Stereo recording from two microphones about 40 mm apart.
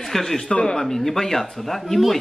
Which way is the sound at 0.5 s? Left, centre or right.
Left.